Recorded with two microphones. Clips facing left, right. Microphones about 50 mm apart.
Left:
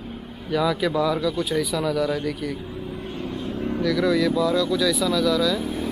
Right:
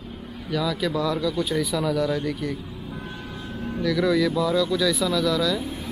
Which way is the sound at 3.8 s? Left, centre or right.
Centre.